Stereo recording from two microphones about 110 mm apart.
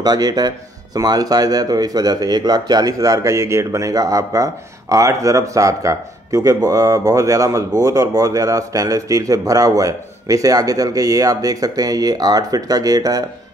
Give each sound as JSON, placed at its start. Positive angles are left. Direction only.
{"t": 0.0, "sound": "speech", "side_deg": -35}